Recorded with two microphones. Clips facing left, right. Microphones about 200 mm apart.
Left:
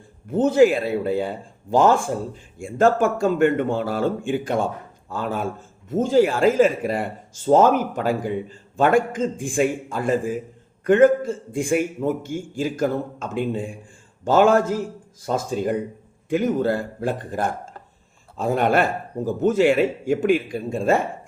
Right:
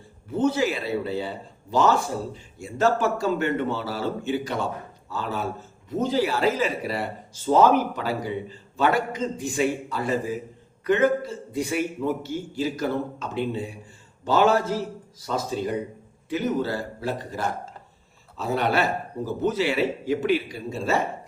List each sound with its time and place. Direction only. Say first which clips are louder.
0.3 s speech: left 7 dB; 50° left (ahead or behind)